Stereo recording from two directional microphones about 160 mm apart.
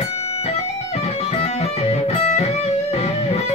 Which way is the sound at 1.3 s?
40° left (ahead or behind).